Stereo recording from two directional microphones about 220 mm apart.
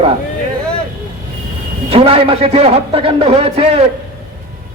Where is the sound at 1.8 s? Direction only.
25° right (ahead or behind).